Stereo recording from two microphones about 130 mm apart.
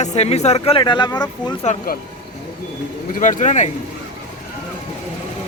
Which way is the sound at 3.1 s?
80° left.